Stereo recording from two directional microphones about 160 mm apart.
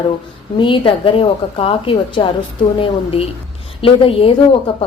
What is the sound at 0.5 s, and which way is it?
A woman's voice, 30° left (ahead or behind).